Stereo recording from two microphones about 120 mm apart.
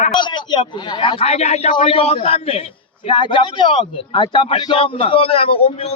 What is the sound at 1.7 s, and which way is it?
Speech, 50° left (ahead or behind).